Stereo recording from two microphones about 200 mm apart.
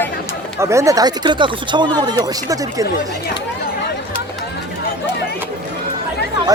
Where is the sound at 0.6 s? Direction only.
15° right (ahead or behind).